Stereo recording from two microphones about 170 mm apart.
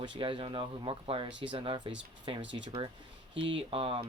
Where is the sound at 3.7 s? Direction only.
30° right (ahead or behind).